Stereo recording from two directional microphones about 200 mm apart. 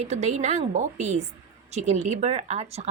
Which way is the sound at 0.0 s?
35° right (ahead or behind).